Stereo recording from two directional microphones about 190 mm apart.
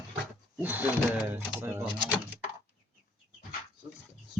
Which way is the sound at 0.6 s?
10° right (ahead or behind).